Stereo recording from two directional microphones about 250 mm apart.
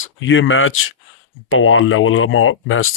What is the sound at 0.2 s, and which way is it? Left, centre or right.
Speech, left.